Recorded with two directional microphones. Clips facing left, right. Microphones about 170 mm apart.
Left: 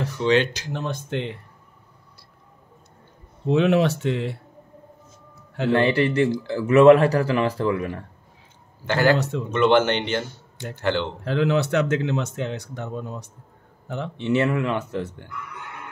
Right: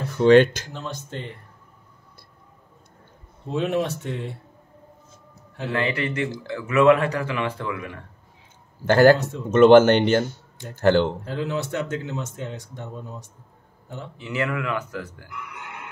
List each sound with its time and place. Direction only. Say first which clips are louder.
0.2 s speech: right 6 dB; 50° right (ahead or behind)
0.7 s speech: left 6 dB; 55° left (ahead or behind)
3.4 s speech: left 5 dB; 75° left (ahead or behind)
5.7 s speech: left 6 dB; 30° left (ahead or behind)
8.8 s speech: right 5 dB; 45° right (ahead or behind)
11.2 s speech: left 6 dB; 75° left (ahead or behind)
14.1 s speech: left 6 dB; 25° left (ahead or behind)